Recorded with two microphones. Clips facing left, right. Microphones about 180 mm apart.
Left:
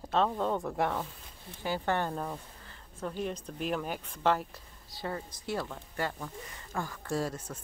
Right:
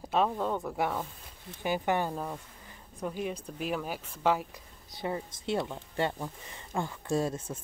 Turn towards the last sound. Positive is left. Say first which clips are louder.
# right 3 dB
turn(degrees=-25)  # may be behind; listen again after turning